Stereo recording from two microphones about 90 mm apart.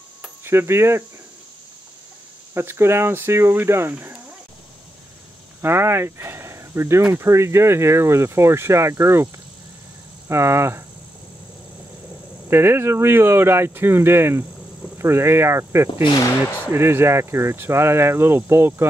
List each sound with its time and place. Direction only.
0.4 s speech: 30° right (ahead or behind)
2.5 s speech: 30° right (ahead or behind)
5.6 s speech: 25° right (ahead or behind)
12.4 s speech: 25° right (ahead or behind)